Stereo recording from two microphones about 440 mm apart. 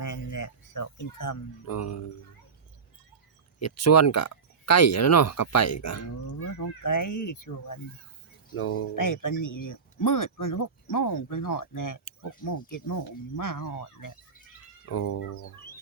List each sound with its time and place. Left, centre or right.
0.0 s speech: left
3.6 s speech: left
8.5 s speech: left
9.0 s speech: left
14.8 s speech: left